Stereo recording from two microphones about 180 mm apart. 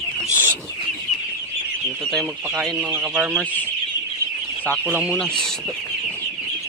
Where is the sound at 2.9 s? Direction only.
10° right (ahead or behind).